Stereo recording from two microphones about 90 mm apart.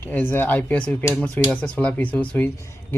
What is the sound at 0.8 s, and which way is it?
Speech, 5° left (ahead or behind).